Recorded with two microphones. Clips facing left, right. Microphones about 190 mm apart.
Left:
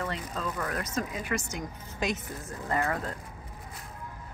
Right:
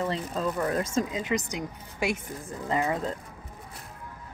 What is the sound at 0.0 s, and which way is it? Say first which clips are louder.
A woman's voice: right 5 dB; 30° right (ahead or behind).